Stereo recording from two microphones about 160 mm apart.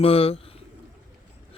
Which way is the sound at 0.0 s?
35° left (ahead or behind).